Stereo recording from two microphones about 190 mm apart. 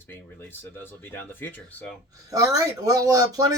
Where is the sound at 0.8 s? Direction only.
10° left (ahead or behind).